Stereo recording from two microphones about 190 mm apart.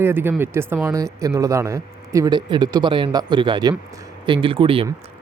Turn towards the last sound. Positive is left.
turn(degrees=-30)  # may be behind; listen again after turning